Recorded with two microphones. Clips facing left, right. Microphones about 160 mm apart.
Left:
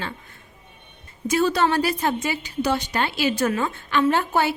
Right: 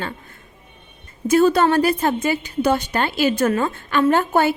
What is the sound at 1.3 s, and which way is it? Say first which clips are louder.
A woman's voice: right 5 dB; 50° right (ahead or behind).